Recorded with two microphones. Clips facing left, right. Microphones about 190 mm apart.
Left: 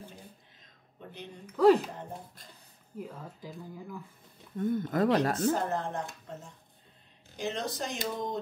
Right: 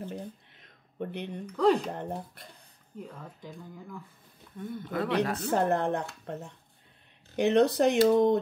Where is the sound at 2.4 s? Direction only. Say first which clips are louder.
Right 4 dB; 65° right (ahead or behind).